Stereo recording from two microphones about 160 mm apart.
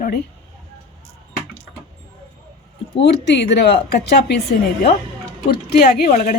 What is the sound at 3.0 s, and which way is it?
A woman's voice, 90° left.